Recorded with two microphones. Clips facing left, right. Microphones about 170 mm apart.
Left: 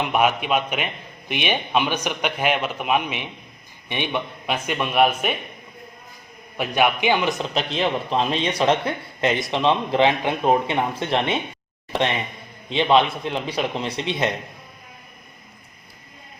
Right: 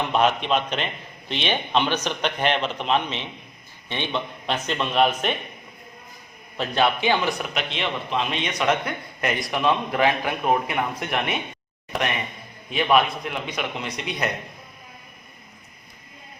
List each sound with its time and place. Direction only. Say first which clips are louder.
0.0 s a man's voice: left 1 dB; 10° left (ahead or behind)
6.6 s a man's voice: left 1 dB; 15° left (ahead or behind)
7.5 s a man's voice: left 5 dB; 35° left (ahead or behind)